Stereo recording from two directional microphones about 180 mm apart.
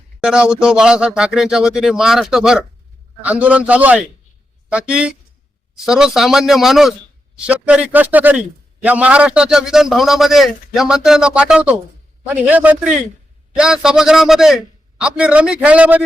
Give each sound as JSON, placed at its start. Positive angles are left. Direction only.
{"t": 0.2, "sound": "a man's voice", "side_deg": -5}